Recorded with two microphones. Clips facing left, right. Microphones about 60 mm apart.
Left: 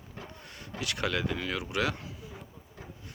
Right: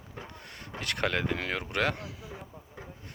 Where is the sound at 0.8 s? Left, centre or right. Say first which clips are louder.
Right 1 dB; right.